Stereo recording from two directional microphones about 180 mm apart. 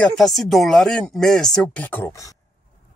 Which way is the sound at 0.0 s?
Centre (ahead or behind).